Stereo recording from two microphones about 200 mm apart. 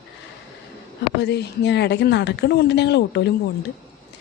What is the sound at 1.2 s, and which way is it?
A woman's voice, 60° left (ahead or behind).